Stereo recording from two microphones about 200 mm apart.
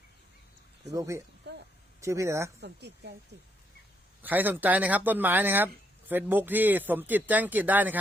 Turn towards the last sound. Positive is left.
turn(degrees=-10)  # may be behind; listen again after turning